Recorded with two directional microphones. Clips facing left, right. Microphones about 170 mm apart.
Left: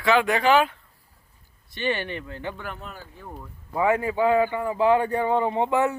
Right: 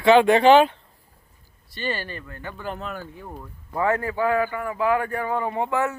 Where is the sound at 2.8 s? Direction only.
90° right.